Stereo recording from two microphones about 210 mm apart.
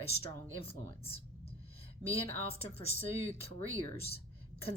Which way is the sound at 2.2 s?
25° left (ahead or behind).